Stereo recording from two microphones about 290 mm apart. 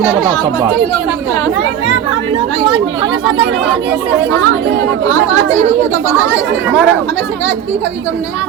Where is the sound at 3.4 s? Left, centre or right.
Right.